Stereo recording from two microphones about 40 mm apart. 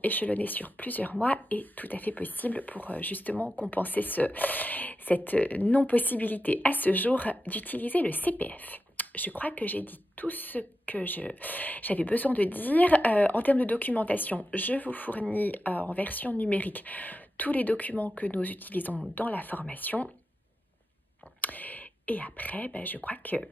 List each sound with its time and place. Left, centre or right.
0.0 s a woman's voice: left
21.4 s speech: left